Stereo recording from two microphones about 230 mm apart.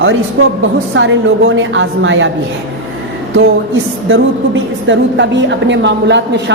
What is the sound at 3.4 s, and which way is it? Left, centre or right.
A woman's voice, right.